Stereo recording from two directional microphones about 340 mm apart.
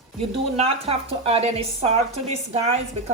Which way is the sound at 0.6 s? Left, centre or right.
Centre.